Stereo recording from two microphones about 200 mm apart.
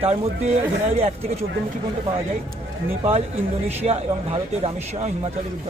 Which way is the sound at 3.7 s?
30° right (ahead or behind).